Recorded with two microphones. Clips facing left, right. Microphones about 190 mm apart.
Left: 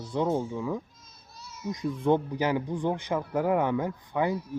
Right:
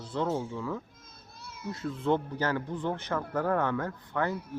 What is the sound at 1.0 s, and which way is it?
Children playing, 55° right (ahead or behind).